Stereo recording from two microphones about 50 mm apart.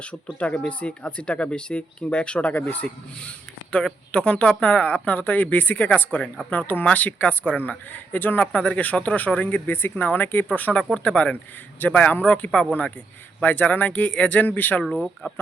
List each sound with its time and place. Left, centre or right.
0.3 s speech: left
2.5 s speech: left
2.8 s speech: left
8.5 s speech: left
10.9 s speech: left
11.8 s speech: left
12.2 s speech: left
13.4 s speech: left